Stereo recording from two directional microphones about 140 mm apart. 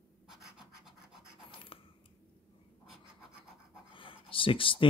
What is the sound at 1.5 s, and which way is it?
Coin, 40° left (ahead or behind).